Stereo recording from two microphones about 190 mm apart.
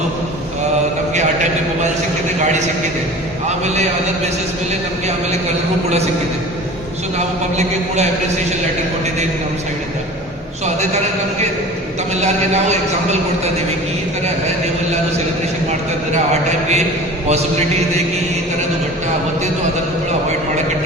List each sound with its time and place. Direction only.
12.1 s a man's voice: 35° right (ahead or behind)
16.1 s a man's voice: 35° right (ahead or behind)